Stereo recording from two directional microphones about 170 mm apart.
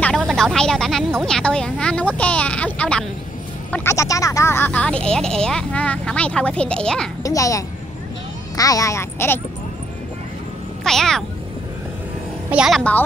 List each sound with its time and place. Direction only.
0.0 s a sound: 5° left (ahead or behind)
3.7 s speech: 15° left (ahead or behind)
7.2 s speech: 20° left (ahead or behind)
10.8 s speech: 5° left (ahead or behind)
12.4 s a woman's voice: 5° right (ahead or behind)